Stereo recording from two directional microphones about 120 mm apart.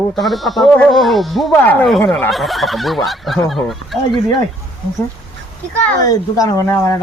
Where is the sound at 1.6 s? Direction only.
15° left (ahead or behind).